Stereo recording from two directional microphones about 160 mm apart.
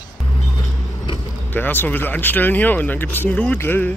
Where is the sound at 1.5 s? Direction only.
10° left (ahead or behind).